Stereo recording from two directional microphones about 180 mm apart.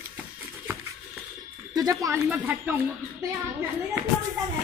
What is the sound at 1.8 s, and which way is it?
Speech, 20° right (ahead or behind).